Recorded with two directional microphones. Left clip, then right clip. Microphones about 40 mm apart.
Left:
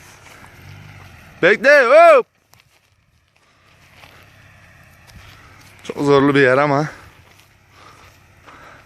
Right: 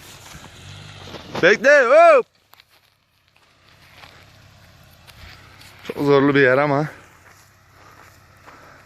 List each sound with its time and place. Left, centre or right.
0.8 s vehicle: right
1.4 s speech: centre
6.0 s speech: left
6.3 s speech: left
6.6 s speech: left
6.8 s a sound: centre